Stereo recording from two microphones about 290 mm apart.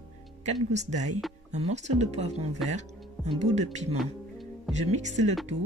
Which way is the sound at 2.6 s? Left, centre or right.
Centre.